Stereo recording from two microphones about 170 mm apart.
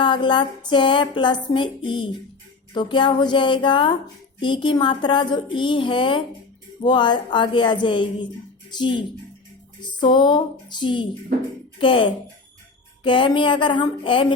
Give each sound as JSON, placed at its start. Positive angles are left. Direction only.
{"t": 0.0, "sound": "speech", "side_deg": 30}